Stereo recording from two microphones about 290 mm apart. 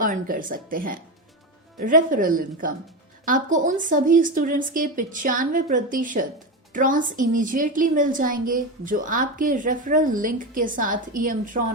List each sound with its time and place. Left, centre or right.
0.0 s a woman's voice: right